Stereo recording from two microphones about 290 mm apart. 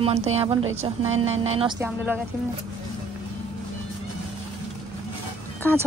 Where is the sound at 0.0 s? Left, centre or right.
Right.